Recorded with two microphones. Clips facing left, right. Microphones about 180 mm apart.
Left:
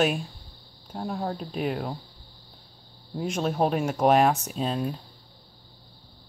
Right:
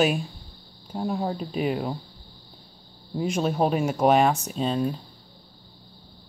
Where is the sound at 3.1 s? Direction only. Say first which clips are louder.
Right 2 dB; centre (ahead or behind).